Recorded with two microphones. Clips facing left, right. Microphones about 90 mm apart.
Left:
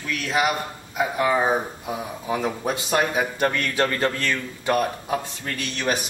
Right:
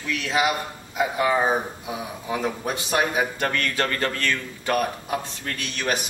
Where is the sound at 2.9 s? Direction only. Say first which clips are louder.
Even; 5° right (ahead or behind).